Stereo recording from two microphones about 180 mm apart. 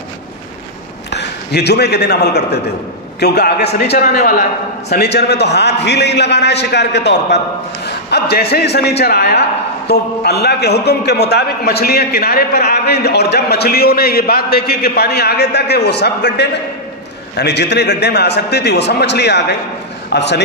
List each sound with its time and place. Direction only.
1.1 s a man's voice: 65° left (ahead or behind)
4.1 s a man's voice: 50° left (ahead or behind); by 20.4 s 70° left (ahead or behind)